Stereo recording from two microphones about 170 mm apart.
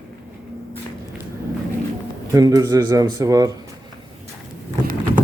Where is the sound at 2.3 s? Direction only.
20° right (ahead or behind).